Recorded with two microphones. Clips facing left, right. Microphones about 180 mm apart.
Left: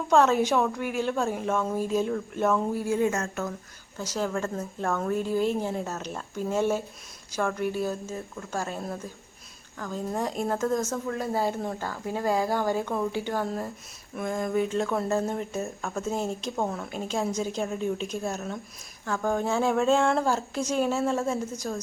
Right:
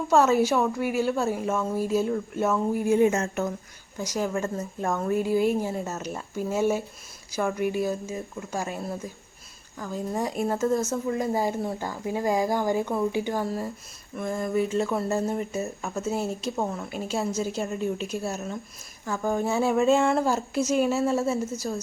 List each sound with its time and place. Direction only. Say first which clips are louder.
0.1 s speech: right 1 dB; 5° right (ahead or behind)
2.8 s a woman's voice: right 4 dB; 20° right (ahead or behind)